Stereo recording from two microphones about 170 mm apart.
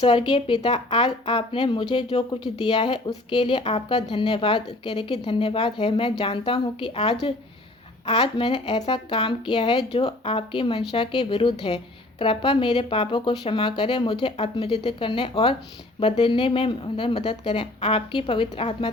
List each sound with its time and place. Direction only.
0.0 s speech: 30° left (ahead or behind)